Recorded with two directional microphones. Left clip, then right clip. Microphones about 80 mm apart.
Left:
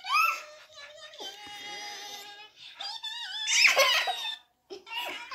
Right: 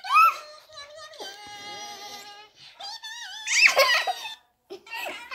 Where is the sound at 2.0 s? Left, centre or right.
Right.